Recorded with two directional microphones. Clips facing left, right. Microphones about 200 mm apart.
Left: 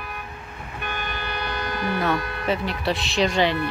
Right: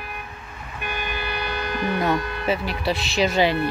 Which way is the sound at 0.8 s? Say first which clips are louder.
Right 2 dB; 10° right (ahead or behind).